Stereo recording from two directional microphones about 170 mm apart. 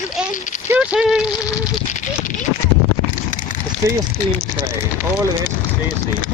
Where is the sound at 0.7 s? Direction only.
5° right (ahead or behind).